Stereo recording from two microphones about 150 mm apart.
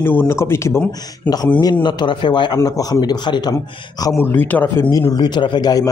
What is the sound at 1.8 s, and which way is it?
A man's voice, 30° left (ahead or behind).